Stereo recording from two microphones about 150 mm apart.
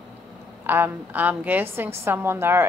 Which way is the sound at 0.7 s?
15° right (ahead or behind).